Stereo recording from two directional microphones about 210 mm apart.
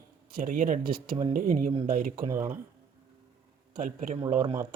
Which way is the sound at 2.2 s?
15° right (ahead or behind).